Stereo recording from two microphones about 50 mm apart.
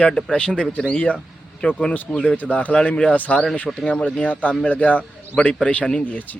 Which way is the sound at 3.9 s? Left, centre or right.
Centre.